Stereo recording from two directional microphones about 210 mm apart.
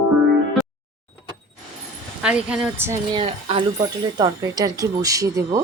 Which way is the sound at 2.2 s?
5° right (ahead or behind).